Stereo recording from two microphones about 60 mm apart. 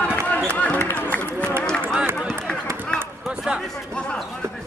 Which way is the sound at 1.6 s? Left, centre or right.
Centre.